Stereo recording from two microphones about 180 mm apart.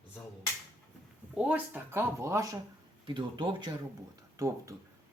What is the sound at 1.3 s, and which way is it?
Speech, 10° right (ahead or behind).